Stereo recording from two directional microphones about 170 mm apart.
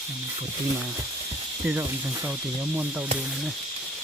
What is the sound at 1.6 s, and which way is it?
Snake, 15° right (ahead or behind).